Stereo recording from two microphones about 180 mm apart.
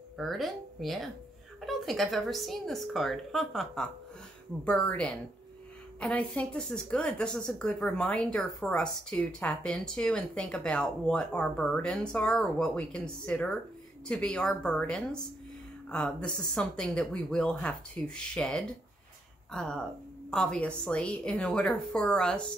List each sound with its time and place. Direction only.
0.2 s speech: centre (ahead or behind)